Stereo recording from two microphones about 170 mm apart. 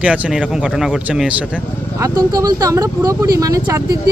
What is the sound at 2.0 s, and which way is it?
Speech, 20° right (ahead or behind).